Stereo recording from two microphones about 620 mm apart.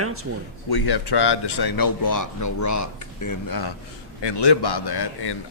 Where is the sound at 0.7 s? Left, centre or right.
Left.